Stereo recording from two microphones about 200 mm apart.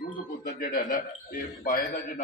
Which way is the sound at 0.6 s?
45° left (ahead or behind).